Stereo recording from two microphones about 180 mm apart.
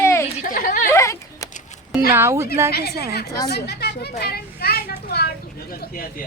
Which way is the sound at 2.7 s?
60° left (ahead or behind).